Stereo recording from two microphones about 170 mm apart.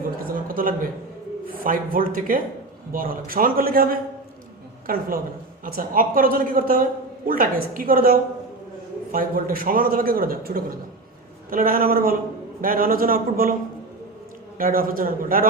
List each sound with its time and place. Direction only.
0.2 s a sound: 55° right (ahead or behind)
1.5 s a man's voice: 55° right (ahead or behind)
14.6 s a man's voice: 55° right (ahead or behind)